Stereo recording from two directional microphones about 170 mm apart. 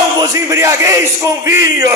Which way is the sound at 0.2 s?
20° right (ahead or behind).